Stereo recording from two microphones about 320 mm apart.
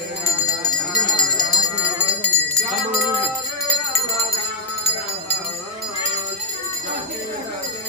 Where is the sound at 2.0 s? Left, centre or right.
Centre.